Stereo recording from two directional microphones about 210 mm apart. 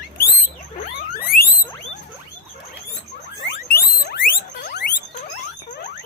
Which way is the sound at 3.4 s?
50° left (ahead or behind).